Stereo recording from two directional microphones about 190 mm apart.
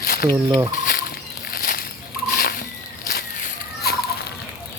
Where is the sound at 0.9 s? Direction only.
50° left (ahead or behind).